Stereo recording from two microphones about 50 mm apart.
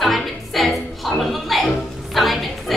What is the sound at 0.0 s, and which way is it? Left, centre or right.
Music, centre.